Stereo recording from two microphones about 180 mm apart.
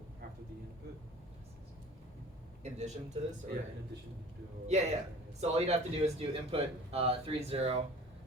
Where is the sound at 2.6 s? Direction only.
40° right (ahead or behind).